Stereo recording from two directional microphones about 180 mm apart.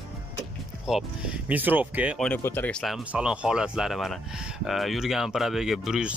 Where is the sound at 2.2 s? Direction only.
10° left (ahead or behind).